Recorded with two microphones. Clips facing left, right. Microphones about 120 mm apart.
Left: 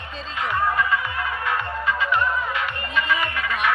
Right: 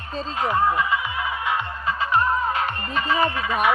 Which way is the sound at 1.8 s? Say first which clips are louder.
Right 2 dB; 35° right (ahead or behind).